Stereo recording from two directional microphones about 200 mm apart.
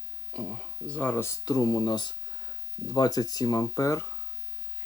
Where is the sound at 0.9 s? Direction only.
5° left (ahead or behind).